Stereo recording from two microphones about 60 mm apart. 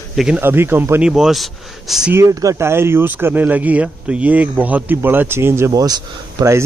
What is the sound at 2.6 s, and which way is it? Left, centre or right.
A man's voice, right.